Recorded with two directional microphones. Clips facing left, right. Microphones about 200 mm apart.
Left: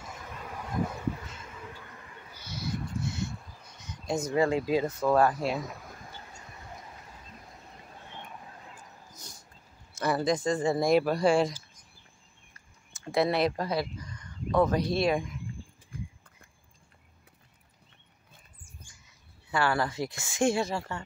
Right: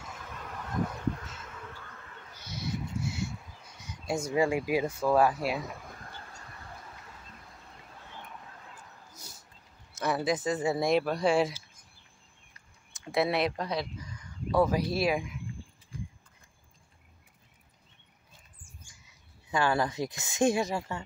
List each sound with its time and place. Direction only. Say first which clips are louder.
0.0 s a sound: left 1 dB; 5° left (ahead or behind)
8.2 s a sound: left 1 dB; 20° left (ahead or behind)
9.1 s dog: left 1 dB; 5° right (ahead or behind)
9.9 s speech: left 2 dB; centre (ahead or behind)
12.9 s speech: left 2 dB; centre (ahead or behind)
19.5 s a woman's voice: even; 20° right (ahead or behind)